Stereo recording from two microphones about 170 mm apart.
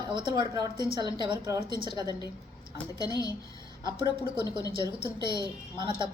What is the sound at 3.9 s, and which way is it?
Speech, 30° right (ahead or behind).